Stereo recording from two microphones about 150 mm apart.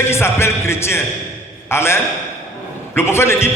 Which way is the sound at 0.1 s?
15° left (ahead or behind).